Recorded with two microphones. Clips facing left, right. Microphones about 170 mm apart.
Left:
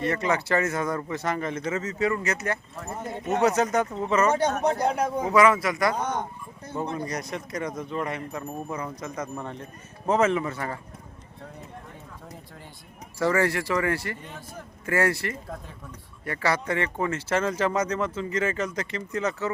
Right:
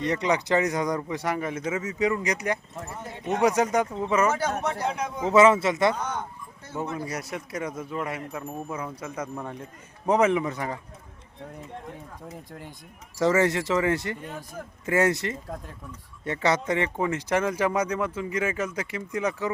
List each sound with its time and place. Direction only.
0.0 s speech: 20° right (ahead or behind)
4.6 s speech: 35° left (ahead or behind)
5.2 s speech: 25° right (ahead or behind)
6.0 s speech: 30° left (ahead or behind)
6.7 s speech: 5° right (ahead or behind)
13.1 s speech: 20° right (ahead or behind)